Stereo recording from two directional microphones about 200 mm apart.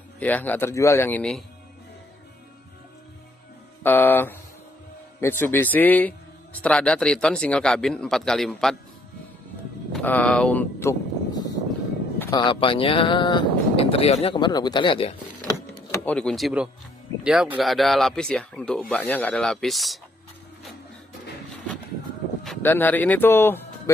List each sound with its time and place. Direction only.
0.2 s a man's voice: 10° left (ahead or behind)
3.8 s a man's voice: 10° left (ahead or behind)
5.4 s a man's voice: 10° left (ahead or behind)
9.9 s speech: 10° left (ahead or behind); by 15.5 s 25° left (ahead or behind)
15.9 s a man's voice: 5° left (ahead or behind)
22.4 s speech: 5° left (ahead or behind)